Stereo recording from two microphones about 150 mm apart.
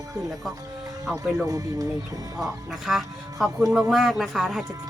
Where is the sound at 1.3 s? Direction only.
20° right (ahead or behind).